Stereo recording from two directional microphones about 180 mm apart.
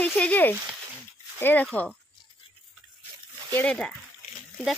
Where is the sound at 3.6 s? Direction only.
5° left (ahead or behind).